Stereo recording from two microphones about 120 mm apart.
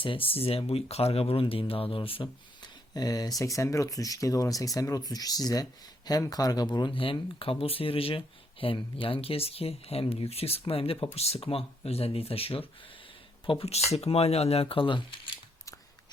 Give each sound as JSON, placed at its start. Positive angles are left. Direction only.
{"t": 0.0, "sound": "speech", "side_deg": 50}
{"t": 2.9, "sound": "speech", "side_deg": 35}
{"t": 13.9, "sound": "speech", "side_deg": 60}